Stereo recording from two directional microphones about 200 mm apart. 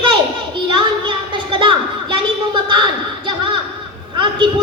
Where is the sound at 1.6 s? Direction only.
25° right (ahead or behind).